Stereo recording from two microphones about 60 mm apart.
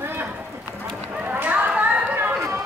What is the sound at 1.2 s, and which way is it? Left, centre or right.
Run, right.